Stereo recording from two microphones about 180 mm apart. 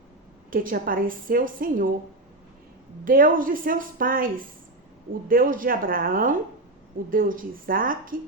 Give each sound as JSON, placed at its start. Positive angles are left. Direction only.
{"t": 0.5, "sound": "a woman's voice", "side_deg": -50}
{"t": 3.0, "sound": "a woman's voice", "side_deg": -50}